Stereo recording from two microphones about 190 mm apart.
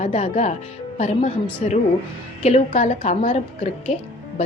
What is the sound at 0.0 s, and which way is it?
Speech, 35° left (ahead or behind).